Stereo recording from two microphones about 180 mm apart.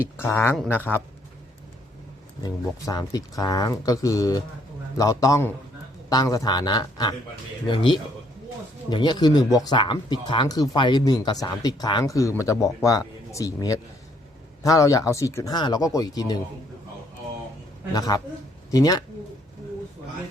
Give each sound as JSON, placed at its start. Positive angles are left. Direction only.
{"t": 0.0, "sound": "speech", "side_deg": 15}
{"t": 0.5, "sound": "speech", "side_deg": 0}
{"t": 2.4, "sound": "speech", "side_deg": 20}
{"t": 17.9, "sound": "speech", "side_deg": 20}